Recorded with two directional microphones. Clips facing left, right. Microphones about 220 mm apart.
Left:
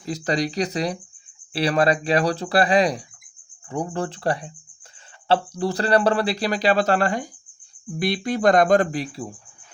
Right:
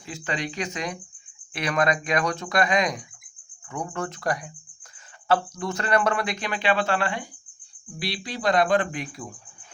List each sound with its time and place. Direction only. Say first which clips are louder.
0.0 s speech: left 7 dB; 40° left (ahead or behind)